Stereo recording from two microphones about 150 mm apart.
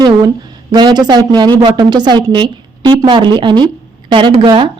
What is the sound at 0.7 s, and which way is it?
A woman's voice, 25° right (ahead or behind).